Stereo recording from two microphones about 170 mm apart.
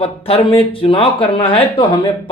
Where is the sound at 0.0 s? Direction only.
35° left (ahead or behind).